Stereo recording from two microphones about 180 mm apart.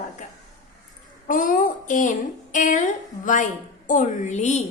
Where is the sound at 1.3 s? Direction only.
45° left (ahead or behind).